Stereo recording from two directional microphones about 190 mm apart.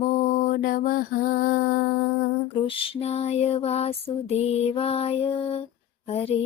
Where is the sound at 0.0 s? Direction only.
40° left (ahead or behind).